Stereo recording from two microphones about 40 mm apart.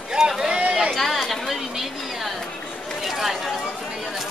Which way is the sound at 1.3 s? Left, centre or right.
Centre.